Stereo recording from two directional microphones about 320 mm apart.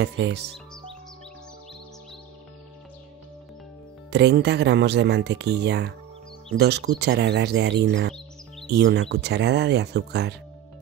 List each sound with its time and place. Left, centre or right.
0.0 s speech: right
4.1 s speech: right